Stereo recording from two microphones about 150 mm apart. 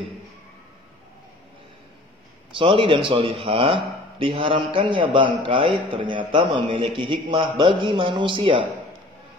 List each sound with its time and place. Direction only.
2.5 s a man's voice: 35° right (ahead or behind)